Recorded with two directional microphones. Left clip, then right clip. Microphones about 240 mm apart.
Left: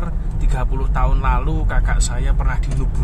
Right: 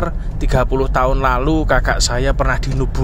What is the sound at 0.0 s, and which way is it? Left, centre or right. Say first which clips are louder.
Speech: right 9 dB; right.